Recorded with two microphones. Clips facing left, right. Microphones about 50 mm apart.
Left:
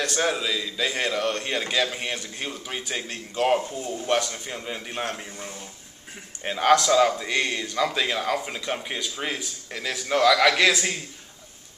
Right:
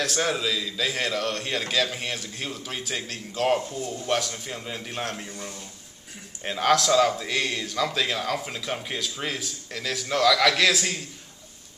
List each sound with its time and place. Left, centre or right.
0.0 s a man's voice: centre
5.3 s speech: left
6.4 s a man's voice: centre